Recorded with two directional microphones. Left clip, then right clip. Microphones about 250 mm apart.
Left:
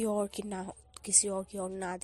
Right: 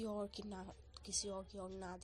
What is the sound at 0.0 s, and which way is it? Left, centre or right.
A woman's voice, left.